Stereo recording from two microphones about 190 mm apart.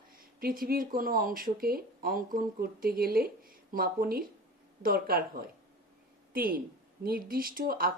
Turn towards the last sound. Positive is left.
turn(degrees=-50)  # may be behind; listen again after turning